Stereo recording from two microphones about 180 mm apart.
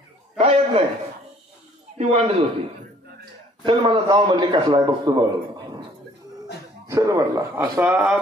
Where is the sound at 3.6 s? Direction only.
30° right (ahead or behind).